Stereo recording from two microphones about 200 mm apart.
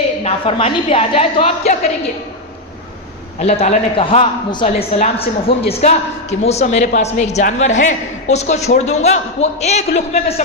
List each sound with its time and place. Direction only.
0.3 s a woman's voice: 30° left (ahead or behind)
3.3 s a man's voice: 35° left (ahead or behind)